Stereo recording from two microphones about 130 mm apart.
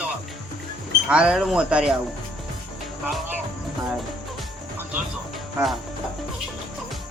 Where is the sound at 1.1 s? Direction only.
10° right (ahead or behind).